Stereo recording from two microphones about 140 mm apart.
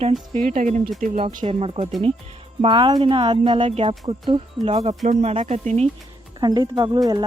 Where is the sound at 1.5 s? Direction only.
45° right (ahead or behind).